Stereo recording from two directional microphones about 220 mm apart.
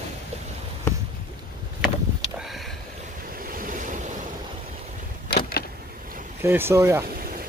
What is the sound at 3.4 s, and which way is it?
Waves, 40° right (ahead or behind).